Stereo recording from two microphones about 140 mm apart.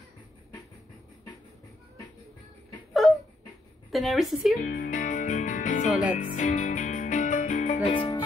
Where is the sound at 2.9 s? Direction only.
Centre (ahead or behind).